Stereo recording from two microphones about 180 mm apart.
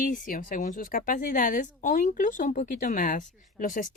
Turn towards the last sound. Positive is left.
turn(degrees=45)  # may be behind; listen again after turning